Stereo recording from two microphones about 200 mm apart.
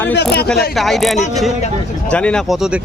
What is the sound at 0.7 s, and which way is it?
Speech, centre (ahead or behind).